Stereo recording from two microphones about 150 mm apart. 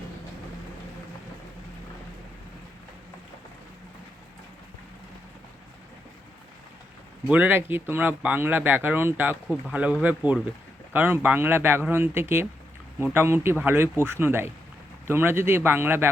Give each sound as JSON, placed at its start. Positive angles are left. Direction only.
{"t": 7.3, "sound": "speech", "side_deg": -10}